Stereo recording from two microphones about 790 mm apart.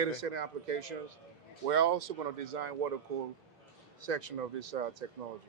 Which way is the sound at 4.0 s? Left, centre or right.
Right.